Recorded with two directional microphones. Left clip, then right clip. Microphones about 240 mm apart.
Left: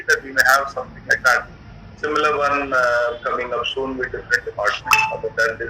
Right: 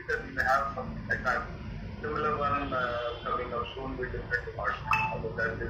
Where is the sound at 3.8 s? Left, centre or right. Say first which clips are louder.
Left 14 dB; left.